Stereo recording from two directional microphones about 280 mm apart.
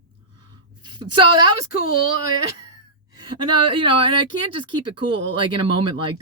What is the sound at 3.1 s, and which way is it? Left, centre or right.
Speech, centre.